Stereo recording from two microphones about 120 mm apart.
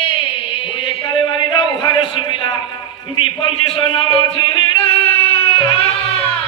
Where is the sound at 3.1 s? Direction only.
45° left (ahead or behind).